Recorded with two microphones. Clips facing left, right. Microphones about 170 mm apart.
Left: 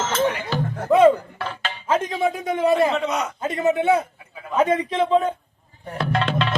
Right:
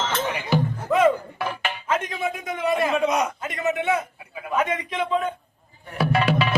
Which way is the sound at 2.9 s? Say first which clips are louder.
Right 2 dB; 10° right (ahead or behind).